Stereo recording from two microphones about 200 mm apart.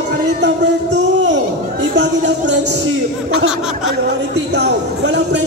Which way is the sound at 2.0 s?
60° right (ahead or behind).